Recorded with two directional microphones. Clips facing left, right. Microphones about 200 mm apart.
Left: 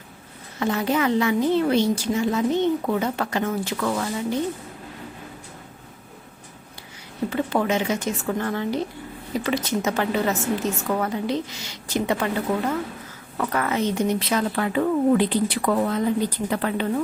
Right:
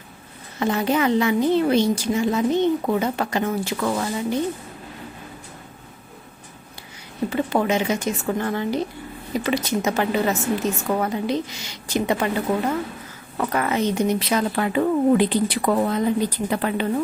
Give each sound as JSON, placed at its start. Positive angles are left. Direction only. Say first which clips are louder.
{"t": 0.6, "sound": "a woman's voice", "louder": "right 2 dB", "side_deg": -20}
{"t": 7.3, "sound": "a woman's voice", "louder": "right 1 dB", "side_deg": -15}